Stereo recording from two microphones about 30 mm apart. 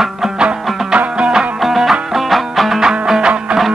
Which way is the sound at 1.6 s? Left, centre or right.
Centre.